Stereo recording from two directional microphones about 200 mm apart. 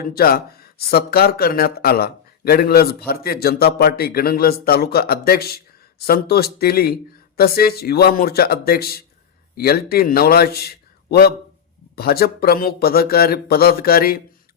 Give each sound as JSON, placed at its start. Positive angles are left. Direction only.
{"t": 0.1, "sound": "speech", "side_deg": 50}